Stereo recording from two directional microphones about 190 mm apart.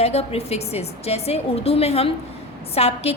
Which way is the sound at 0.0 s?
35° left (ahead or behind).